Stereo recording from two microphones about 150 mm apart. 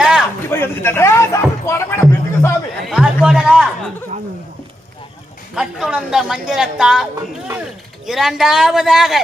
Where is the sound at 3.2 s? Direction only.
5° right (ahead or behind).